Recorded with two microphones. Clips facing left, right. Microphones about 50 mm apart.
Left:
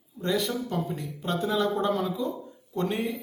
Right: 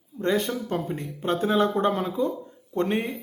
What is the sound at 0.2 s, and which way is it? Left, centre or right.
Speech, right.